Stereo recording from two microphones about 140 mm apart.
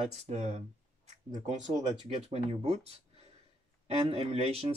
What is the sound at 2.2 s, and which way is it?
Speech, 45° right (ahead or behind).